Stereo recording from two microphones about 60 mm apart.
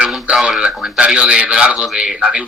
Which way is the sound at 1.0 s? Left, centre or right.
Centre.